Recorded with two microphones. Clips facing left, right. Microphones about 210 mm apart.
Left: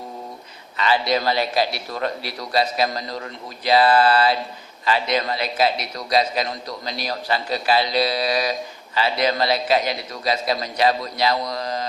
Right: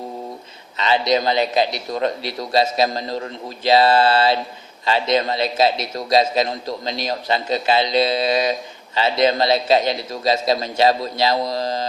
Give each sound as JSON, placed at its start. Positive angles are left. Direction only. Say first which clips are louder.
{"t": 0.8, "sound": "a man's voice", "louder": "right 2 dB", "side_deg": -20}